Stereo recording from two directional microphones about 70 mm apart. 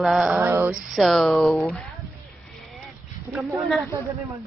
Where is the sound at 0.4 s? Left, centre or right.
Right.